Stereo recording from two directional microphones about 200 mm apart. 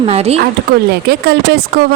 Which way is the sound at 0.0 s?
30° right (ahead or behind).